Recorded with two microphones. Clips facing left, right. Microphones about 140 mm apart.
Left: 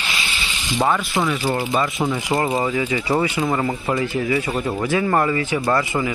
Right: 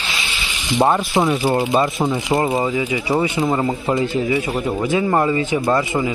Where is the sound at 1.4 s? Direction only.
20° right (ahead or behind).